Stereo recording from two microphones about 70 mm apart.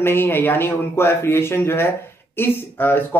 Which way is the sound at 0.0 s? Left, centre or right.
Left.